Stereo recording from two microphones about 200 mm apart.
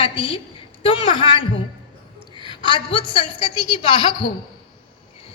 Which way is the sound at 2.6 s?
25° left (ahead or behind).